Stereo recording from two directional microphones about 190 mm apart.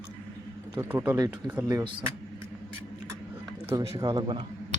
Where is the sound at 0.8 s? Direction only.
10° right (ahead or behind).